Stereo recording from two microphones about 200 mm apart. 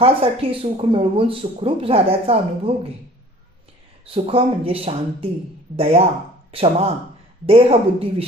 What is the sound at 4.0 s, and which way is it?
Speech, 30° right (ahead or behind).